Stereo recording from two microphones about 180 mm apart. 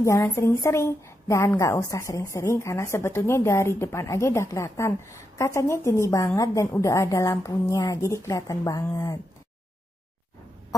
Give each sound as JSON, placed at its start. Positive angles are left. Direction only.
{"t": 0.0, "sound": "a woman's voice", "side_deg": 15}